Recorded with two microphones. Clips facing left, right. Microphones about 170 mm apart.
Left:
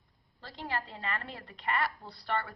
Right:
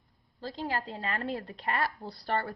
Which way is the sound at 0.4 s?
35° right (ahead or behind).